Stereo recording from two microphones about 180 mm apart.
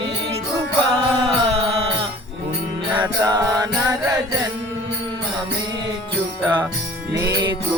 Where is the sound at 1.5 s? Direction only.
30° right (ahead or behind).